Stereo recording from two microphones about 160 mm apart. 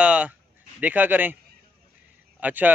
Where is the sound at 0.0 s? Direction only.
5° right (ahead or behind).